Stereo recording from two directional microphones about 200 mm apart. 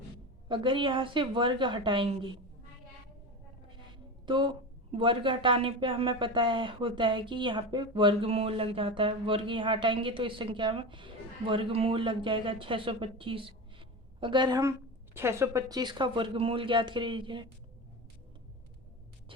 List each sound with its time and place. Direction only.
0.4 s a woman's voice: 25° right (ahead or behind)
3.9 s a woman's voice: 25° right (ahead or behind)